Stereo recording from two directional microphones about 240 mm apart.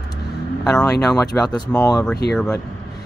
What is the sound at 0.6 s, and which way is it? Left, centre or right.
Speech, centre.